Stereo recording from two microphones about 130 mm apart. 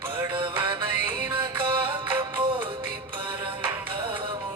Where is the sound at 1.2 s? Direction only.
15° right (ahead or behind).